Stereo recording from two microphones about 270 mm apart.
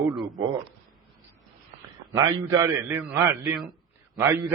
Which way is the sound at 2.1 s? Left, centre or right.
Centre.